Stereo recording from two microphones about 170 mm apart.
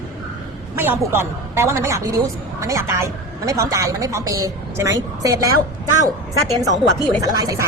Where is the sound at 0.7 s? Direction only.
10° right (ahead or behind).